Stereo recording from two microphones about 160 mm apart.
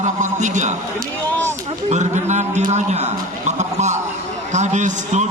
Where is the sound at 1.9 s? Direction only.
45° right (ahead or behind).